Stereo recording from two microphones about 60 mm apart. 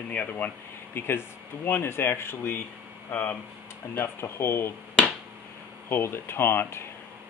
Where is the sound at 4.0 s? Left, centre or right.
Left.